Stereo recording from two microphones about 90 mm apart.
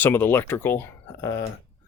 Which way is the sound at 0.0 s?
25° left (ahead or behind).